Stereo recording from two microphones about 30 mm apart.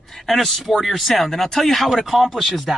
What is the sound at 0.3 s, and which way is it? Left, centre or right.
Speech, centre.